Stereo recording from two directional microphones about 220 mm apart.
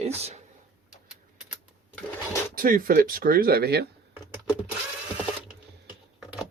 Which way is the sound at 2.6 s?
40° right (ahead or behind).